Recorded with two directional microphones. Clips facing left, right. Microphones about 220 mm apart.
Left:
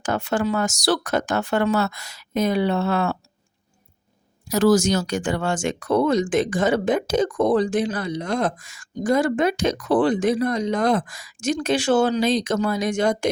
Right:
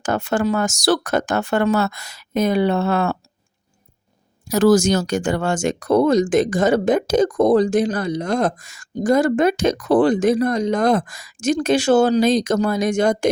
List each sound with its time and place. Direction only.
0.0 s speech: 45° right (ahead or behind)
4.5 s speech: 50° right (ahead or behind)